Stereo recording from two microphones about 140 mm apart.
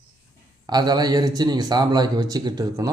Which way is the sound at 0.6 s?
30° right (ahead or behind).